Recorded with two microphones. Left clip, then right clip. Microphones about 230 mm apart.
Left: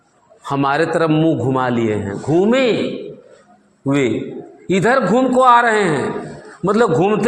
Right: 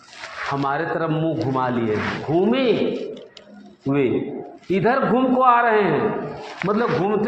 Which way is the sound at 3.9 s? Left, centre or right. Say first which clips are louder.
Left 3 dB; left.